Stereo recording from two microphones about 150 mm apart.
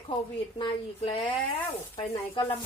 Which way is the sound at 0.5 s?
35° left (ahead or behind).